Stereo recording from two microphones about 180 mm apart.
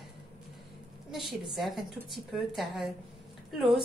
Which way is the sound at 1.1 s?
Centre (ahead or behind).